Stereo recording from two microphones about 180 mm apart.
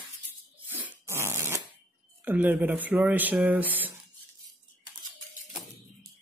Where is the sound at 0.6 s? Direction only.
10° right (ahead or behind).